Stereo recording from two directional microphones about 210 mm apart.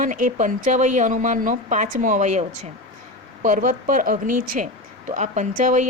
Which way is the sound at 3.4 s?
40° right (ahead or behind).